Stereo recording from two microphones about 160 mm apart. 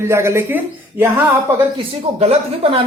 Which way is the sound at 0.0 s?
15° right (ahead or behind).